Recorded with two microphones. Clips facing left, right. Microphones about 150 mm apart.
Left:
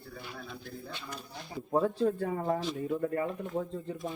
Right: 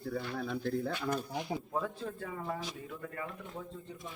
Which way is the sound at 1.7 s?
35° left (ahead or behind).